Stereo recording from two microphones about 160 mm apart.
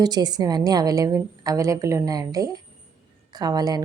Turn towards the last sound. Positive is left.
turn(degrees=-25)  # may be behind; listen again after turning